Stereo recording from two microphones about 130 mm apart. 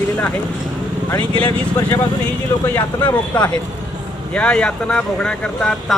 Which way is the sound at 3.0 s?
35° left (ahead or behind).